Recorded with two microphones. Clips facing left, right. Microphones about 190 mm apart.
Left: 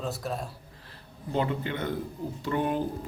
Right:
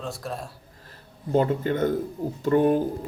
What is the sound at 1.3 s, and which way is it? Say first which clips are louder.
A man's voice: right 7 dB; 45° right (ahead or behind).